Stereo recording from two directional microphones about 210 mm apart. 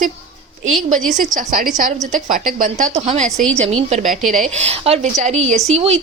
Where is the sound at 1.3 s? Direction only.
40° right (ahead or behind).